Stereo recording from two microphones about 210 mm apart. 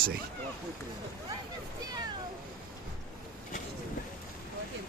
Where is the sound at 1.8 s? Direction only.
20° right (ahead or behind).